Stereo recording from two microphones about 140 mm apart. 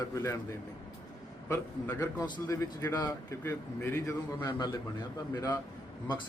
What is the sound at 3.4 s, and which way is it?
Speech, 15° left (ahead or behind).